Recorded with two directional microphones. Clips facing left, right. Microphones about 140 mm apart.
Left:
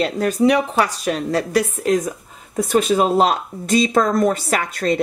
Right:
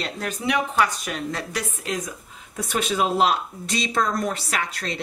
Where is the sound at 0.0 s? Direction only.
35° left (ahead or behind).